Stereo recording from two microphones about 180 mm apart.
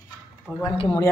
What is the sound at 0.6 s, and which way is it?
Speech, 25° left (ahead or behind).